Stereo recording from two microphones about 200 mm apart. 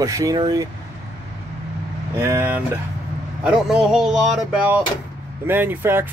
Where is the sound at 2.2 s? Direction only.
10° right (ahead or behind).